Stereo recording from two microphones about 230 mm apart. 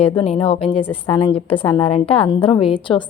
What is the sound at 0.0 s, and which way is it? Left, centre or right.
A woman's voice, left.